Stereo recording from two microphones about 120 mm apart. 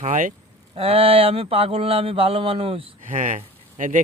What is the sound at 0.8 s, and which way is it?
Speech, 50° right (ahead or behind).